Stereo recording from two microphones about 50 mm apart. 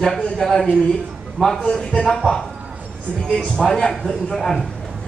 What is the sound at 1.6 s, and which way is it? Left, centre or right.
Speech, centre.